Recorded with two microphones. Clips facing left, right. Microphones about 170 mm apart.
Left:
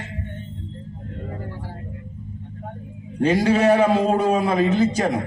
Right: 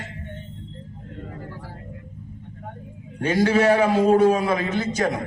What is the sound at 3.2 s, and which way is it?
A man's voice, 35° left (ahead or behind).